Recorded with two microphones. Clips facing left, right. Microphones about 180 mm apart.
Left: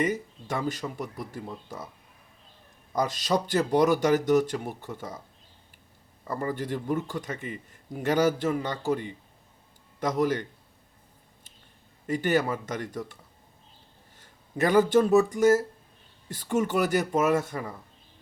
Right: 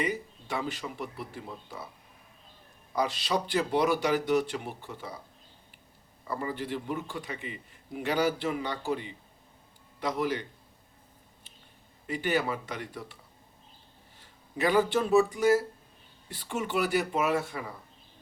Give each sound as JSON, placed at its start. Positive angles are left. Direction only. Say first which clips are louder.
{"t": 0.0, "sound": "speech", "louder": "left 4 dB", "side_deg": 45}
{"t": 2.9, "sound": "speech", "louder": "left 3 dB", "side_deg": 45}
{"t": 6.2, "sound": "speech", "louder": "left 3 dB", "side_deg": 45}
{"t": 12.0, "sound": "speech", "louder": "left 4 dB", "side_deg": 45}
{"t": 14.2, "sound": "speech", "louder": "left 3 dB", "side_deg": 45}